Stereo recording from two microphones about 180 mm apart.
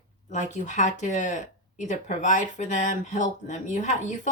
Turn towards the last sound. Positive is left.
turn(degrees=45)  # may be behind; listen again after turning